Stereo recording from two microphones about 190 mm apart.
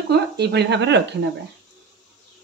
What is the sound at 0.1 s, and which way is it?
Speech, 60° right (ahead or behind).